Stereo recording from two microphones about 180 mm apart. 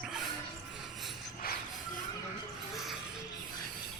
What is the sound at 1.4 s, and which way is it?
Music, 55° left (ahead or behind).